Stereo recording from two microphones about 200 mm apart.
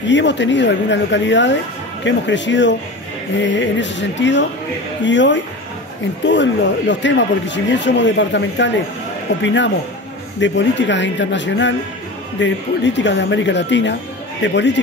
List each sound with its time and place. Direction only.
0.0 s speech: 65° left (ahead or behind)